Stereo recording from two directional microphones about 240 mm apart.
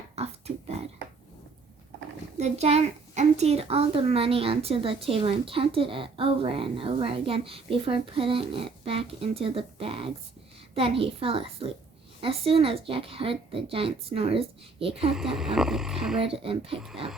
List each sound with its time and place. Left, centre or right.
0.2 s a child's voice: right
2.4 s a child's voice: right
15.1 s speech: centre
16.2 s a child's voice: right